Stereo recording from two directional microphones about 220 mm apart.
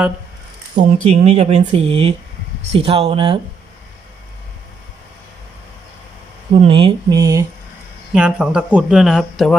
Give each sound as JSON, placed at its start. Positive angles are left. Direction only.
{"t": 0.8, "sound": "speech", "side_deg": -35}
{"t": 6.5, "sound": "speech", "side_deg": -25}
{"t": 8.1, "sound": "speech", "side_deg": -5}